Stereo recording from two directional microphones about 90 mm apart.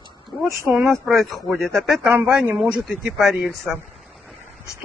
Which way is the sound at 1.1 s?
Centre (ahead or behind).